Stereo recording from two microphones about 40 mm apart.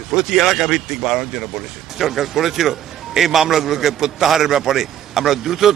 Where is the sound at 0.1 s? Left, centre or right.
Centre.